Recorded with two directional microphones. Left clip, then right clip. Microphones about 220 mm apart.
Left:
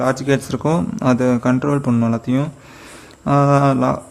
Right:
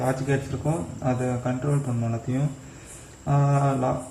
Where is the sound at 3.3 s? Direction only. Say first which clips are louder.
Left 10 dB; 55° left (ahead or behind).